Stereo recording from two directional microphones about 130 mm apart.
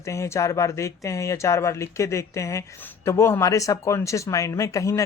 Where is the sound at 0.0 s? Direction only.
20° left (ahead or behind).